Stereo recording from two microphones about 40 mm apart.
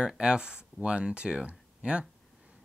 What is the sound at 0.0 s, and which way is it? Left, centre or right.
Speech, right.